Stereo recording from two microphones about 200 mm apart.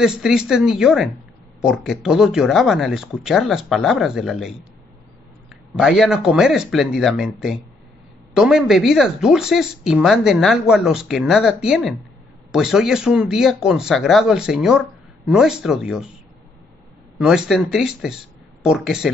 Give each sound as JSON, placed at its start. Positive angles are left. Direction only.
{"t": 0.0, "sound": "speech", "side_deg": -5}
{"t": 5.8, "sound": "speech", "side_deg": 0}
{"t": 17.2, "sound": "speech", "side_deg": 0}